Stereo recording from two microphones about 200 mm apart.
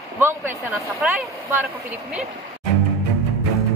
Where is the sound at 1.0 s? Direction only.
5° right (ahead or behind).